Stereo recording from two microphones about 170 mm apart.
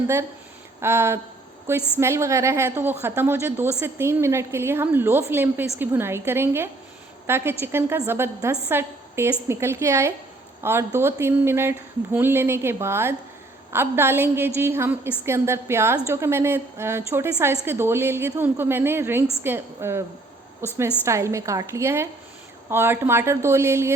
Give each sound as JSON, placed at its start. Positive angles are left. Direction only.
{"t": 0.8, "sound": "a woman's voice", "side_deg": -15}